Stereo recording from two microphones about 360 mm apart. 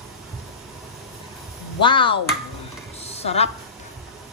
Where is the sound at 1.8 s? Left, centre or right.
Centre.